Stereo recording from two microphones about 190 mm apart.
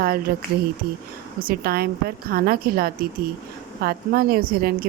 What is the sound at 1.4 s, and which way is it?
A woman's voice, 55° right (ahead or behind).